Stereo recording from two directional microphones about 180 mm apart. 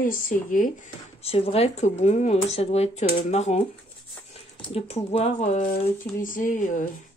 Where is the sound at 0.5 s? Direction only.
50° left (ahead or behind).